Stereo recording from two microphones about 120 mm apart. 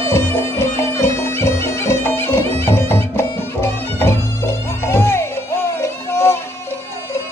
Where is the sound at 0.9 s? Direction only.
25° left (ahead or behind).